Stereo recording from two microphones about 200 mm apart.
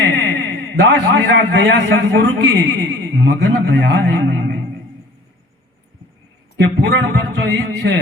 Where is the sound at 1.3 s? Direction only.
60° right (ahead or behind).